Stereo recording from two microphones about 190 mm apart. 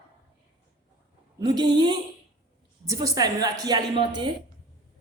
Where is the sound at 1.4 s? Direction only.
20° right (ahead or behind).